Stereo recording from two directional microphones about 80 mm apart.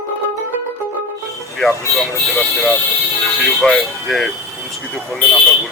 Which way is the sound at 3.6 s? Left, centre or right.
Centre.